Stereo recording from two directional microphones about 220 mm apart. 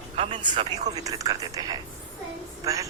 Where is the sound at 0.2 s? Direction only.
25° right (ahead or behind).